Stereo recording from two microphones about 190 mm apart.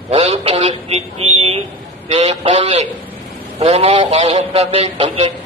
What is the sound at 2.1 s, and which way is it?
Speech, 30° right (ahead or behind).